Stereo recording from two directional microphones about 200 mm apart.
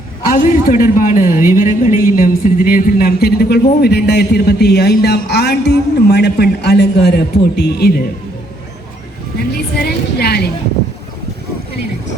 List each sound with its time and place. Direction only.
0.3 s speech: 45° left (ahead or behind)
9.7 s music: 50° left (ahead or behind)